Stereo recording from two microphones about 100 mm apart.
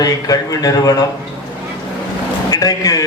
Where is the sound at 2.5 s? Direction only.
40° left (ahead or behind).